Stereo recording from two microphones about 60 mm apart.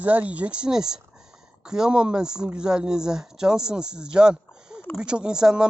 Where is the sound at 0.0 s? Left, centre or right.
Right.